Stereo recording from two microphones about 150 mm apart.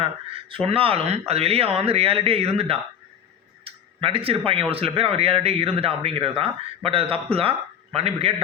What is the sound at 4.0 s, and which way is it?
A man's voice, 35° right (ahead or behind).